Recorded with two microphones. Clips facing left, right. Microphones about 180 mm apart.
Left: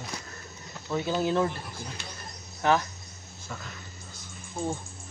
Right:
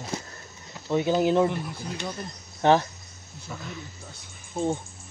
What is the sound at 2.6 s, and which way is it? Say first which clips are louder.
Speech: right 5 dB; 30° right (ahead or behind).